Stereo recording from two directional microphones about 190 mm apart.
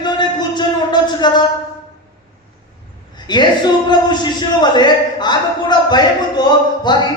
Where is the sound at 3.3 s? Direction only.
25° left (ahead or behind).